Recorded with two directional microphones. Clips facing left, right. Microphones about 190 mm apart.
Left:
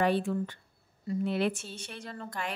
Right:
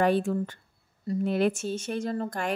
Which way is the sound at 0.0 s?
45° right (ahead or behind).